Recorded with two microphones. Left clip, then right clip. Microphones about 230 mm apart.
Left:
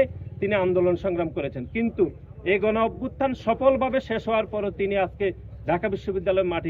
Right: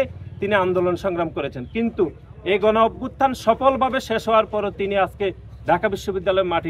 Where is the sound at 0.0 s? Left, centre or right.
Centre.